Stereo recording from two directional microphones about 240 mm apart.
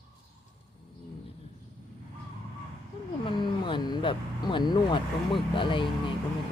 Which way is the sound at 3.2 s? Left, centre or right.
Centre.